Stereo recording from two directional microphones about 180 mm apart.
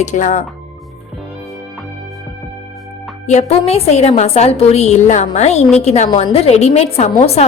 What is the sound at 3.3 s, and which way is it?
A woman's voice, 40° left (ahead or behind).